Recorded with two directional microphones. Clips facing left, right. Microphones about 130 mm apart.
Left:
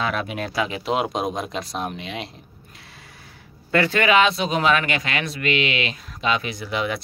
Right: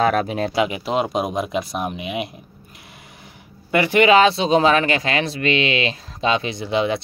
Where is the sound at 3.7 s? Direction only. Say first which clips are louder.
Right 4 dB; 15° right (ahead or behind).